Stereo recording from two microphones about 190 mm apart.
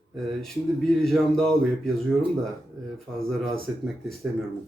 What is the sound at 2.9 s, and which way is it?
Speech, centre (ahead or behind).